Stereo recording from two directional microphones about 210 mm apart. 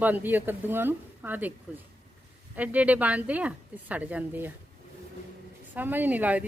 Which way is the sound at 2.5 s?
5° right (ahead or behind).